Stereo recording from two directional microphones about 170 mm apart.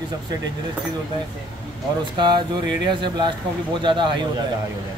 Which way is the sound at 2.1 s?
25° right (ahead or behind).